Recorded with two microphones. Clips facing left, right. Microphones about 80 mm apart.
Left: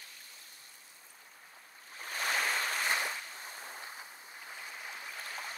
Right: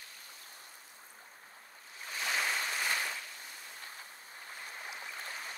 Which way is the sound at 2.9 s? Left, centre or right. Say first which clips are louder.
Left 2 dB; left.